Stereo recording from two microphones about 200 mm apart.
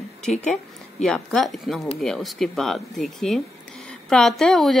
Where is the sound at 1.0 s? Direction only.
Centre (ahead or behind).